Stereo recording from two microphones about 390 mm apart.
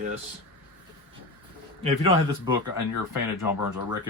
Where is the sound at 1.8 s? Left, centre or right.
Centre.